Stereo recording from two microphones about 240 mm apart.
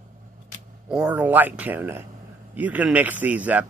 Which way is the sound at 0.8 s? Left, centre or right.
Centre.